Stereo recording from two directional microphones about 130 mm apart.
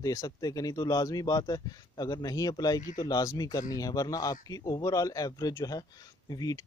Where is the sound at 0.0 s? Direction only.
30° left (ahead or behind).